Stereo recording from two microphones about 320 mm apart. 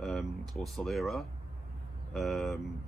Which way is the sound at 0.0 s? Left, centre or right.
Centre.